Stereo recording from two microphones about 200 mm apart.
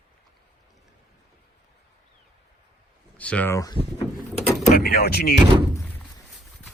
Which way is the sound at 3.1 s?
5° left (ahead or behind).